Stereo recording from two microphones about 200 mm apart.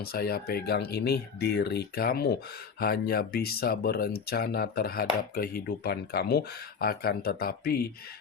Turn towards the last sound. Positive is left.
turn(degrees=50)  # may be behind; listen again after turning